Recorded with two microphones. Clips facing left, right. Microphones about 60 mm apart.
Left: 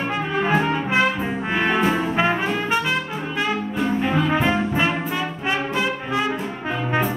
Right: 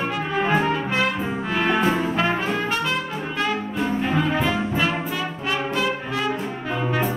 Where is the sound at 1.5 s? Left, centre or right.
Left.